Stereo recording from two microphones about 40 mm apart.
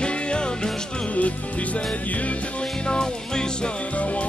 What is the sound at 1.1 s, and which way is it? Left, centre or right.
Music, left.